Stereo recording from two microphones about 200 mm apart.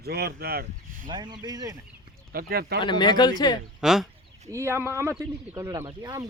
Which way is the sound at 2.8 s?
20° left (ahead or behind).